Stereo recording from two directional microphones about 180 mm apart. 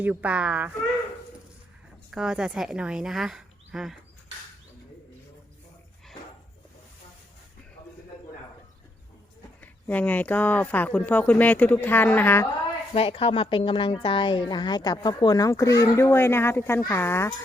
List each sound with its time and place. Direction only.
0.0 s a child's voice: 10° right (ahead or behind)
2.0 s speech: 5° right (ahead or behind)
9.6 s speech: 10° left (ahead or behind)
12.9 s speech: 30° left (ahead or behind); by 17.3 s 15° left (ahead or behind)